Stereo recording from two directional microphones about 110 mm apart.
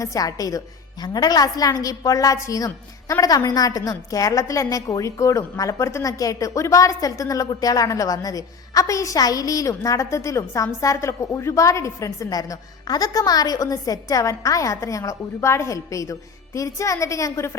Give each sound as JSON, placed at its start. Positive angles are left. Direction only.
{"t": 0.0, "sound": "a woman's voice", "side_deg": 30}